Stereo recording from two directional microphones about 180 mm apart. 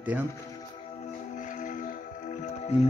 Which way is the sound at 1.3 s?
45° left (ahead or behind).